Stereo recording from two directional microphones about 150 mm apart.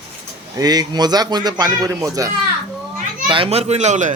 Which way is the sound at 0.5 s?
25° right (ahead or behind).